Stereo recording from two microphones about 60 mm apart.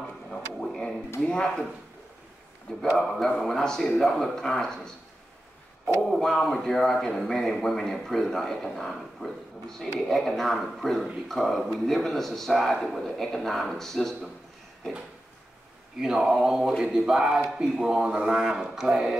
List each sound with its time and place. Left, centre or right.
0.3 s a sound: centre
1.2 s speech: centre
3.0 s speech: centre
6.0 s a man's voice: centre
16.0 s speech: centre